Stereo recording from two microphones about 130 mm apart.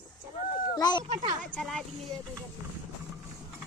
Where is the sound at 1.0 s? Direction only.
45° right (ahead or behind).